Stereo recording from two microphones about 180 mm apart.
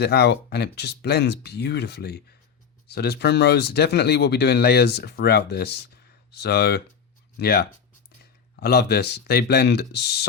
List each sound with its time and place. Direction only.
0.0 s speech: 65° left (ahead or behind)